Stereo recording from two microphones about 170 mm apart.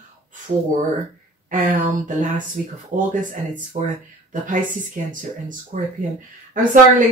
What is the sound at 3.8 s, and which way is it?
Speech, 40° right (ahead or behind).